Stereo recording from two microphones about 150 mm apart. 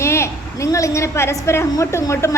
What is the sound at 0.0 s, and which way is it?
A woman's voice, 20° left (ahead or behind).